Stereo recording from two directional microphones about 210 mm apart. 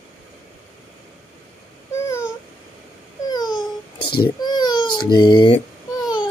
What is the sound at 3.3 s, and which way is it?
Babbling, 20° left (ahead or behind).